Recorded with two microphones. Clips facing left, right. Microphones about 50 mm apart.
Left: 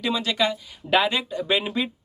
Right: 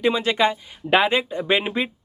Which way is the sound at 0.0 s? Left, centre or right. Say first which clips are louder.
Right 4 dB; right.